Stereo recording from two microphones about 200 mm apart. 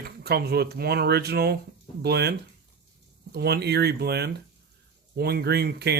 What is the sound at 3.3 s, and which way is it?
Speech, 55° right (ahead or behind).